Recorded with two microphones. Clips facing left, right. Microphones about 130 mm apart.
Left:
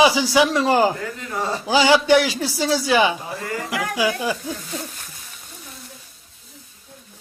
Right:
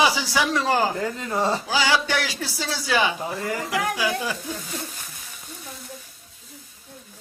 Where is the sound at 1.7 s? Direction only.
20° left (ahead or behind).